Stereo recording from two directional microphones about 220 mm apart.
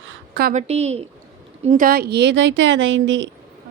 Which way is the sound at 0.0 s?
60° right (ahead or behind).